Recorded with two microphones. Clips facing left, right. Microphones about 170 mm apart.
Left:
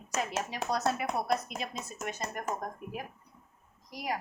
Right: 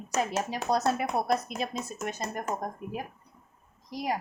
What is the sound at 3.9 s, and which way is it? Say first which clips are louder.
Speech: right 4 dB; 30° right (ahead or behind).